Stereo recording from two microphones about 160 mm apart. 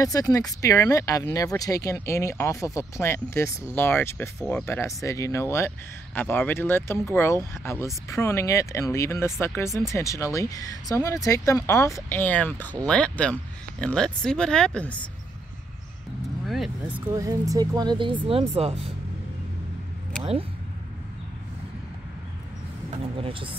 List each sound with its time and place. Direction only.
0.0 s speech: 20° left (ahead or behind)
16.4 s speech: centre (ahead or behind)
17.1 s speech: 20° right (ahead or behind); by 18.9 s 40° right (ahead or behind)